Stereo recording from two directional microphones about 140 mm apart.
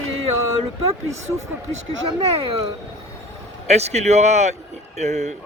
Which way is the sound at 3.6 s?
50° right (ahead or behind).